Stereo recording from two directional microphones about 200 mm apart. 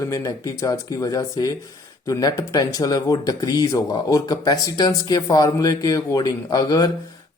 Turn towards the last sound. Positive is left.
turn(degrees=20)  # may be behind; listen again after turning